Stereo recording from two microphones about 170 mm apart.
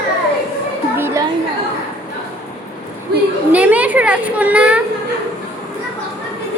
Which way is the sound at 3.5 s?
10° right (ahead or behind).